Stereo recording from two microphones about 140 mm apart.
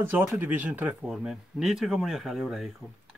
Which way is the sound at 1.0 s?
Centre (ahead or behind).